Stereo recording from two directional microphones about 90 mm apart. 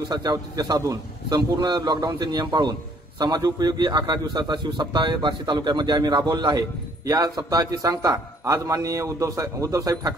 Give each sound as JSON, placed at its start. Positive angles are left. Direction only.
{"t": 0.1, "sound": "a man's voice", "side_deg": -50}